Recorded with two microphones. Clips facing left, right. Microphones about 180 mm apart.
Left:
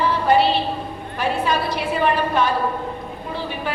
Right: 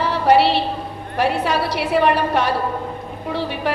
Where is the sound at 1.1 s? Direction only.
70° right (ahead or behind).